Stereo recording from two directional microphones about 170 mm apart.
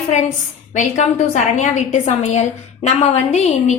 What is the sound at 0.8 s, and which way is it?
A woman's voice, 40° left (ahead or behind).